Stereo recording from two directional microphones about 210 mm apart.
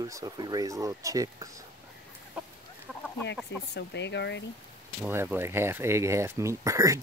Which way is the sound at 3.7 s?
55° left (ahead or behind).